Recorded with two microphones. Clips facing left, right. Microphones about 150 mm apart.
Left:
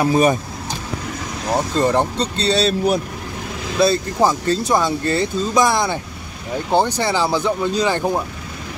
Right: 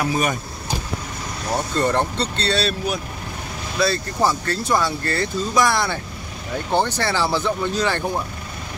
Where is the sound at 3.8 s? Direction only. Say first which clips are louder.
Left 4 dB; 20° left (ahead or behind).